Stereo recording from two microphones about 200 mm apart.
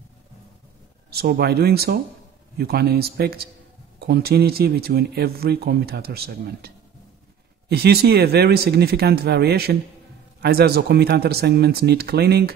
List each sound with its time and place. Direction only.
1.1 s speech: 50° right (ahead or behind)